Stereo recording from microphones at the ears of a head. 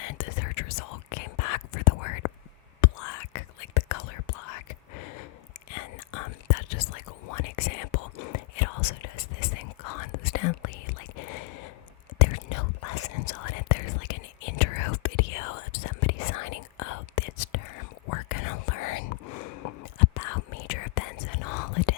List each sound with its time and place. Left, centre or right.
0.0 s whispering: left